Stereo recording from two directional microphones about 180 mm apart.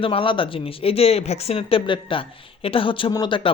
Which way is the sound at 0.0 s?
30° left (ahead or behind).